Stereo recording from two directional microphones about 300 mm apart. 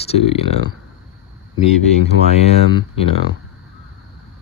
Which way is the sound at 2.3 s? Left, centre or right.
Left.